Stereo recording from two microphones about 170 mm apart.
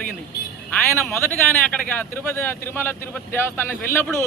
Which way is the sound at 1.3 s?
10° left (ahead or behind).